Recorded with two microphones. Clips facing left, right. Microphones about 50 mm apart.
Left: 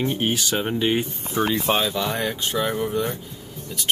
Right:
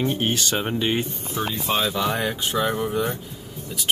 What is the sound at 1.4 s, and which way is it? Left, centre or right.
Speech, left.